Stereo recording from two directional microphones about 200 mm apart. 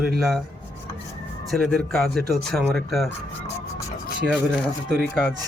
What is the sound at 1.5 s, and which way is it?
Speech, centre (ahead or behind).